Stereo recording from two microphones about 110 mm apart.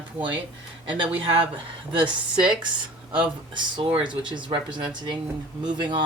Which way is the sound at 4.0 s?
45° right (ahead or behind).